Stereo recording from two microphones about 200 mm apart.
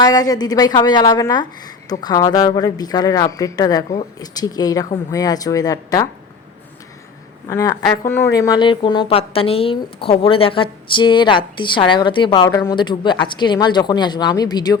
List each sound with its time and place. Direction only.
0.0 s a woman's voice: 20° left (ahead or behind)
7.4 s a woman's voice: 15° left (ahead or behind)